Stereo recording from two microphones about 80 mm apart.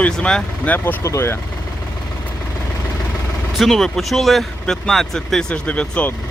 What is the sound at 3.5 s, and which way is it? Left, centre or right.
Speech, centre.